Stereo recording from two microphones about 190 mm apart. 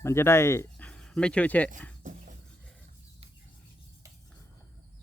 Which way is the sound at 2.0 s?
40° right (ahead or behind).